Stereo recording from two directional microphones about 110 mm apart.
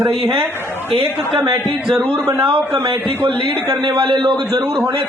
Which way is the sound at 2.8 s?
50° right (ahead or behind).